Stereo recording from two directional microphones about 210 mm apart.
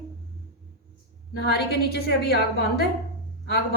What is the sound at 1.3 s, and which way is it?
Speech, 50° left (ahead or behind).